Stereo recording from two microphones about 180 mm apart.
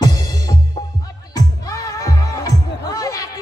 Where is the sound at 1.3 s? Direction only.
20° left (ahead or behind).